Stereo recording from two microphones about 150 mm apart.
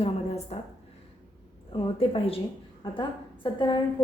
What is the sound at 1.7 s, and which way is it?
Speech, 35° left (ahead or behind).